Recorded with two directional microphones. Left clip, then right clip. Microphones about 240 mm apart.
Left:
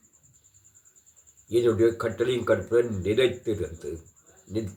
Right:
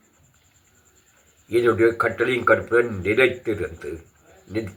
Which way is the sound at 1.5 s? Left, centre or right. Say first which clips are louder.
Right 4 dB; centre.